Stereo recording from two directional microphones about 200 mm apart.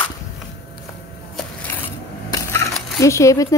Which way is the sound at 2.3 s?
15° left (ahead or behind).